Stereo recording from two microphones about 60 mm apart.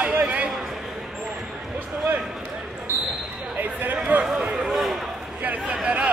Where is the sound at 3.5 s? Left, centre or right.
Right.